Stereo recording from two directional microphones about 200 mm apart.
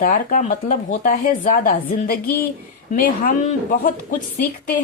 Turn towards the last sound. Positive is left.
turn(degrees=40)  # may be behind; listen again after turning